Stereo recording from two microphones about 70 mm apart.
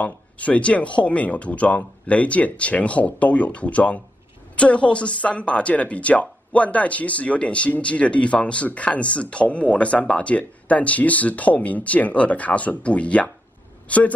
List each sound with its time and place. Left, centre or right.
0.0 s speech: centre